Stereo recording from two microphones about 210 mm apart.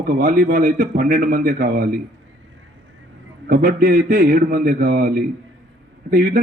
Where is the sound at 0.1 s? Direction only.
40° right (ahead or behind).